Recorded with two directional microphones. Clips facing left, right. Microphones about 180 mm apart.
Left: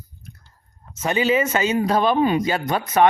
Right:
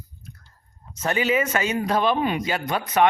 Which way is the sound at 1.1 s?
25° left (ahead or behind).